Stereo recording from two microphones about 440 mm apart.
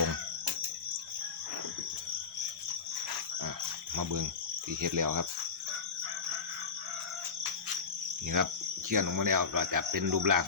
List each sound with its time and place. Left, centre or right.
3.9 s speech: right
8.4 s cricket: right
8.9 s speech: right